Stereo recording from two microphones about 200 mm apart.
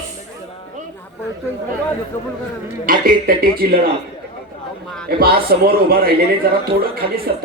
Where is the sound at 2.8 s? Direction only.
45° right (ahead or behind).